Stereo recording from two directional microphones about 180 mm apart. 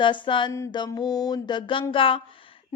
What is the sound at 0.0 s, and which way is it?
A woman's voice, 25° left (ahead or behind).